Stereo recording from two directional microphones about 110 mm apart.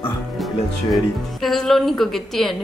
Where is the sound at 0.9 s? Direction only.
Centre (ahead or behind).